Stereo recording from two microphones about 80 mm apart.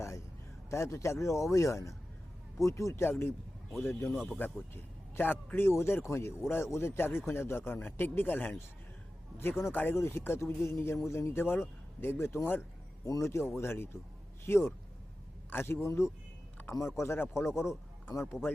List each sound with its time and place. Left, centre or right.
0.7 s speech: left
13.1 s a man's voice: left